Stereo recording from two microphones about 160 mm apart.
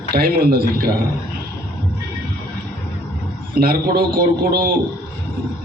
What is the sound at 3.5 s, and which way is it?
A man's voice, 70° right (ahead or behind).